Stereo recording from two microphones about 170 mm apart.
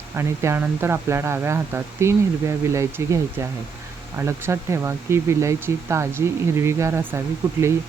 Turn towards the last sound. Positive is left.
turn(degrees=-15)  # may be behind; listen again after turning